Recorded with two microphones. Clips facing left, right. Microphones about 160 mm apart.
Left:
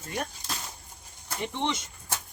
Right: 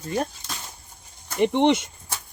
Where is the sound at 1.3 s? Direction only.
65° right (ahead or behind).